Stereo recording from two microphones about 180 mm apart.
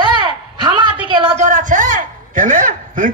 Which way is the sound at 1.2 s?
40° right (ahead or behind).